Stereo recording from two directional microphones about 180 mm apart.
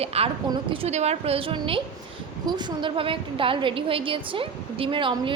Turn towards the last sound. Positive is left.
turn(degrees=-25)  # may be behind; listen again after turning